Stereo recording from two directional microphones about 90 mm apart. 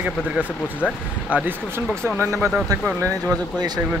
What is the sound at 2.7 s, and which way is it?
Speech, 45° right (ahead or behind).